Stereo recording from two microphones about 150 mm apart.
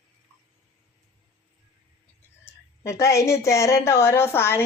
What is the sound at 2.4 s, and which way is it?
A woman's voice, 20° left (ahead or behind).